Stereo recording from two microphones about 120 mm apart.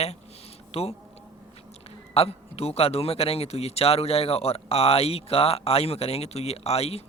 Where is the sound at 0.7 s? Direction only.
55° left (ahead or behind).